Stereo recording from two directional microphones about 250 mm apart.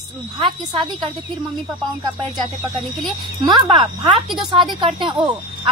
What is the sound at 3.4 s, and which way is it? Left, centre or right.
Speech, centre.